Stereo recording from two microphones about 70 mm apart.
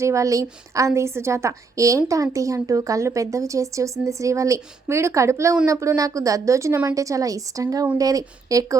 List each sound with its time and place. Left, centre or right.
0.0 s a woman's voice: right